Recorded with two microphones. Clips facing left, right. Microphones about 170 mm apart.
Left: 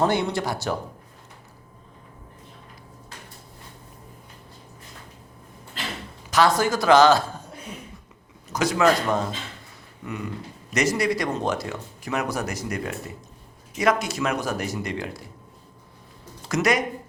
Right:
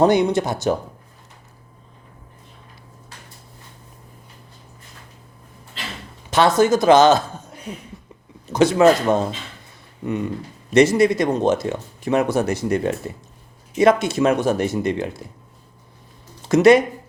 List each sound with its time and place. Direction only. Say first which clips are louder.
0.0 s speech: right 7 dB; 20° right (ahead or behind)
6.3 s speech: right 5 dB; 25° right (ahead or behind)
8.5 s speech: right 6 dB; 25° right (ahead or behind)
10.7 s speech: right 9 dB; 30° right (ahead or behind)
16.5 s speech: right 10 dB; 25° right (ahead or behind)